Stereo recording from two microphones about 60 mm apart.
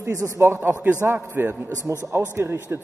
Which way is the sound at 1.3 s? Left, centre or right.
Right.